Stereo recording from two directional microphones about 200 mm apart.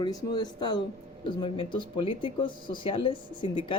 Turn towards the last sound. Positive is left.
turn(degrees=25)  # may be behind; listen again after turning